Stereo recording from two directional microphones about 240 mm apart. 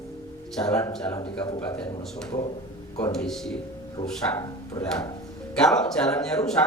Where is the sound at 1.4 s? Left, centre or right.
Centre.